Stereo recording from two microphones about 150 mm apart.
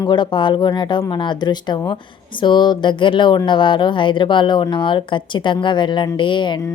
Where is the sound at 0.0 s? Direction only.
30° left (ahead or behind).